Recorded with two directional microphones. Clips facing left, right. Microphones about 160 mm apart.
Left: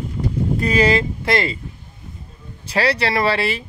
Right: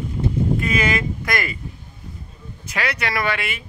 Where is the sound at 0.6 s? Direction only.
35° left (ahead or behind).